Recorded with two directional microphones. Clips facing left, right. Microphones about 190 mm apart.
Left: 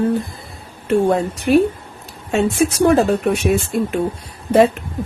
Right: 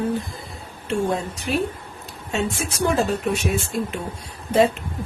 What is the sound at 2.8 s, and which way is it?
Speech, 60° left (ahead or behind).